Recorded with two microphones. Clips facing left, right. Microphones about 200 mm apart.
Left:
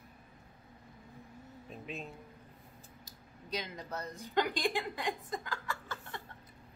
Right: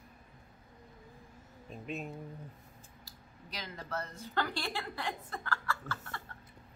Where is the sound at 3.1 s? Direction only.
20° left (ahead or behind).